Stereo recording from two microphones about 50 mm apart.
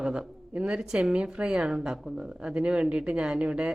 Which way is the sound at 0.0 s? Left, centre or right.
Centre.